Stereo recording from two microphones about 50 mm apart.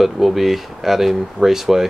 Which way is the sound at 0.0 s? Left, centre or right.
Centre.